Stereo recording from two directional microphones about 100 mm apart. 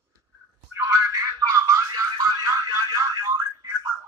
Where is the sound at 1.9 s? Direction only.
40° right (ahead or behind).